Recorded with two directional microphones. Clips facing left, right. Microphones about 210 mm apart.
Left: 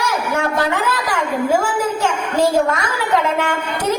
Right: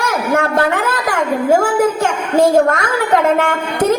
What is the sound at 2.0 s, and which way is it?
A woman's voice, 50° right (ahead or behind).